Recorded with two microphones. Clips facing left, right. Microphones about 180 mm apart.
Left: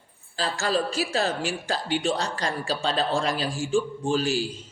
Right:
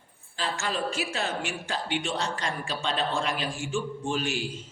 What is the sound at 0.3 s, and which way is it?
Speech, 35° left (ahead or behind).